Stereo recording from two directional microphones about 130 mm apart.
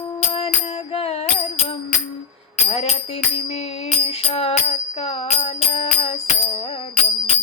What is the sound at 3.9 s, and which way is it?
Music, 50° left (ahead or behind).